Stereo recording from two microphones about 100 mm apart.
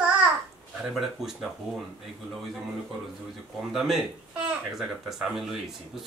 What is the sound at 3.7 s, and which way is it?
Speech, 5° right (ahead or behind).